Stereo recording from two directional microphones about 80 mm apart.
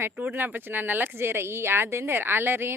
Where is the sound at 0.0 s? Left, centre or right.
Right.